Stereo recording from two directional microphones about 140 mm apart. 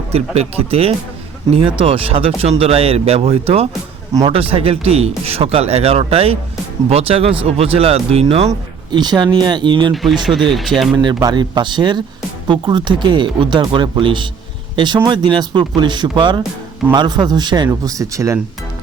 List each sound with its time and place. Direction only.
0.1 s speech: 45° right (ahead or behind)
8.9 s speech: 30° right (ahead or behind)
9.9 s speech: centre (ahead or behind)
10.9 s speech: 30° right (ahead or behind)